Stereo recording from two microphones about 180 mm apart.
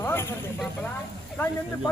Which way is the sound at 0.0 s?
15° left (ahead or behind).